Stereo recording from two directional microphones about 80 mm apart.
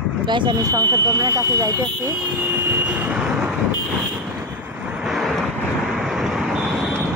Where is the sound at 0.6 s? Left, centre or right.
Right.